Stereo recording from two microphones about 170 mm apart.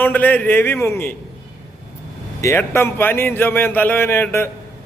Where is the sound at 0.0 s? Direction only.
10° left (ahead or behind).